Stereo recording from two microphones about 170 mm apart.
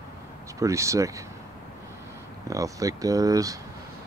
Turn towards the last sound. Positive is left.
turn(degrees=-20)  # may be behind; listen again after turning